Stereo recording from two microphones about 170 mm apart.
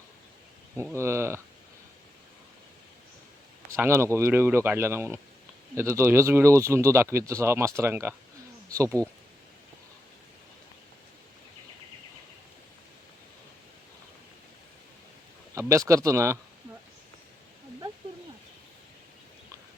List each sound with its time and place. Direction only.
0.9 s speech: 15° right (ahead or behind)
3.8 s speech: 15° right (ahead or behind)
15.5 s speech: 20° right (ahead or behind)